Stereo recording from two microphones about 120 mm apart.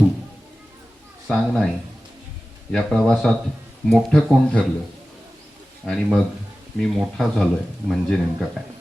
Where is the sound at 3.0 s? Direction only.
Centre (ahead or behind).